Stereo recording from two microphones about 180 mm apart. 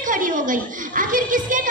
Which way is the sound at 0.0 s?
45° right (ahead or behind).